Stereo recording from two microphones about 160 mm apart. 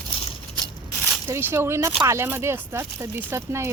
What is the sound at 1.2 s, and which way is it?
Speech, 15° right (ahead or behind).